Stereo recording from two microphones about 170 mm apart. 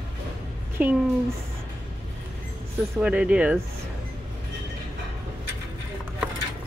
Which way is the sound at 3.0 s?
5° right (ahead or behind).